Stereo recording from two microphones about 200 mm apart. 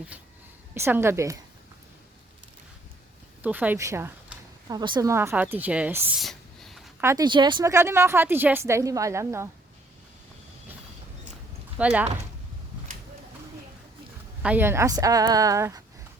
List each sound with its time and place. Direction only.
0.7 s a woman's voice: 10° right (ahead or behind)
3.4 s a sound: 10° right (ahead or behind)
4.8 s a woman's voice: 20° right (ahead or behind)
6.1 s a sound: centre (ahead or behind)
7.0 s a woman's voice: 15° right (ahead or behind)
11.8 s a woman's voice: 5° right (ahead or behind)
14.4 s a woman's voice: 10° right (ahead or behind)